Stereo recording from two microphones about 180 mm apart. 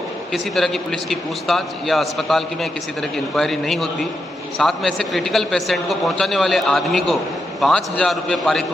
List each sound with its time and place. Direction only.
0.3 s a man's voice: centre (ahead or behind)